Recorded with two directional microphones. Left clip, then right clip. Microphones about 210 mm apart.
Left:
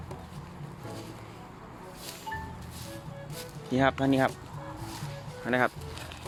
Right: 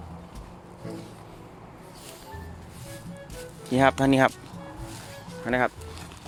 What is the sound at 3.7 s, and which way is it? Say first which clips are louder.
Speech: right 5 dB; 25° right (ahead or behind).